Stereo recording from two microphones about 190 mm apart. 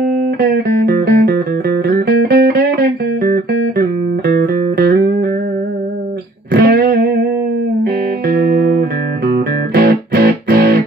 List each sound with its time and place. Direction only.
0.0 s music: 55° right (ahead or behind)
6.5 s music: 55° right (ahead or behind)